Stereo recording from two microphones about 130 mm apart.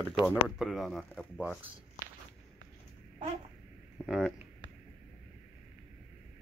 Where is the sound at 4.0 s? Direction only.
10° left (ahead or behind).